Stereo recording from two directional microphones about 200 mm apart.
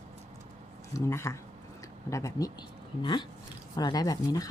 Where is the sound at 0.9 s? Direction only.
15° left (ahead or behind).